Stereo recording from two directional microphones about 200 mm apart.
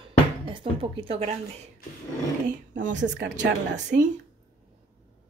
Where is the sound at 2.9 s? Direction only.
65° right (ahead or behind).